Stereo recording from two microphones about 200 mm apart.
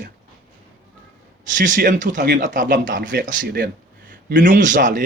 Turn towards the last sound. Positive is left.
turn(degrees=-40)  # may be behind; listen again after turning